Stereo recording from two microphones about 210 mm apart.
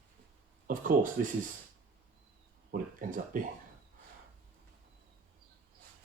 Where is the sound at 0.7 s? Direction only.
40° right (ahead or behind).